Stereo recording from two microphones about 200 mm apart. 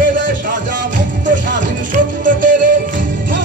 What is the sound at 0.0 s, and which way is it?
Music, 45° right (ahead or behind).